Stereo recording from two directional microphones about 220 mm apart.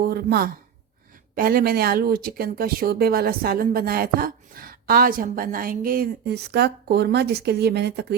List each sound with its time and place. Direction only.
0.0 s speech: 45° right (ahead or behind)